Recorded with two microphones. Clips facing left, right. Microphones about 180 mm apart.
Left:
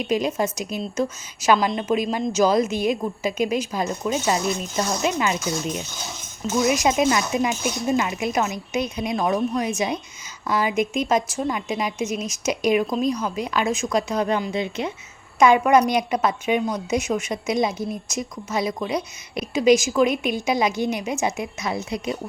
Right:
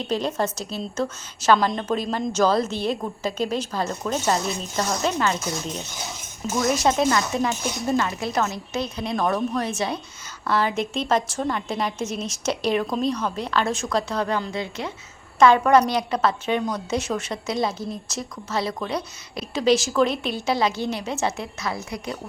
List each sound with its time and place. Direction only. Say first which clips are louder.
0.0 s a woman's voice: left 2 dB; 10° left (ahead or behind)